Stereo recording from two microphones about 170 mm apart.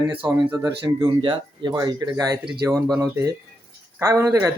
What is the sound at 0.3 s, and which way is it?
Speech, 20° right (ahead or behind).